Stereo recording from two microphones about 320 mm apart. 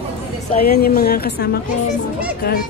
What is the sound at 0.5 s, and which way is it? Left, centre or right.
A woman's voice, left.